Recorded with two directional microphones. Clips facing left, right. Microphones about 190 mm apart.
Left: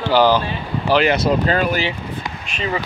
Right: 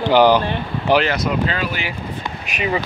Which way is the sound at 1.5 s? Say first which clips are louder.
Left 6 dB; 45° left (ahead or behind).